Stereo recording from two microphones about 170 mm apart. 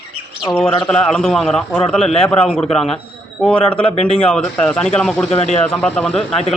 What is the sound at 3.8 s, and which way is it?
Speech, 40° left (ahead or behind).